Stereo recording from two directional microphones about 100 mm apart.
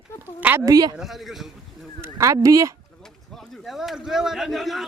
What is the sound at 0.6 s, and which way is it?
Speech, 40° right (ahead or behind).